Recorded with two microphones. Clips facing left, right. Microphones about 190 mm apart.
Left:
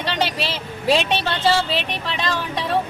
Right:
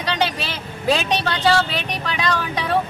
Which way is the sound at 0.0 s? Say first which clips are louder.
Right 1 dB; centre (ahead or behind).